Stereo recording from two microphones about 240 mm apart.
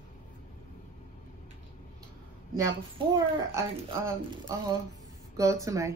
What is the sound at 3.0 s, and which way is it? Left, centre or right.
Speech, right.